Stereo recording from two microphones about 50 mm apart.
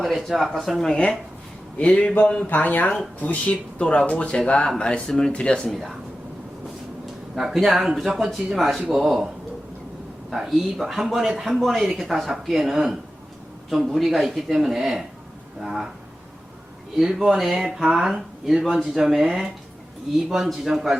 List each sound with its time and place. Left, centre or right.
0.0 s speech: centre
0.8 s speech: centre
2.5 s speech: left; by 5.7 s centre
5.7 s speech: centre
7.3 s speech: centre
10.3 s speech: centre
17.0 s speech: centre